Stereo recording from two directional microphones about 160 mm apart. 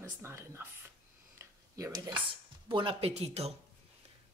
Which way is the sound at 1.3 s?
20° right (ahead or behind).